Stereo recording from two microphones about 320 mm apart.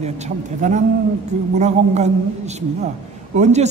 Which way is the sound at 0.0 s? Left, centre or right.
Right.